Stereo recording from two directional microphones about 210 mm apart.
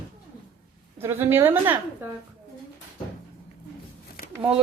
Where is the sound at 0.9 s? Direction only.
10° right (ahead or behind).